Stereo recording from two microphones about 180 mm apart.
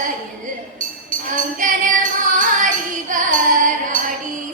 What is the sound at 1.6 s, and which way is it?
Music, 45° right (ahead or behind).